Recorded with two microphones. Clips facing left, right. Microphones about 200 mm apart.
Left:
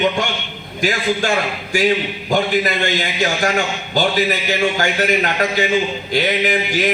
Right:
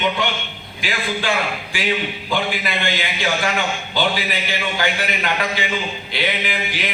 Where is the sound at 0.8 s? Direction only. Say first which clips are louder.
Left 6 dB; 45° left (ahead or behind).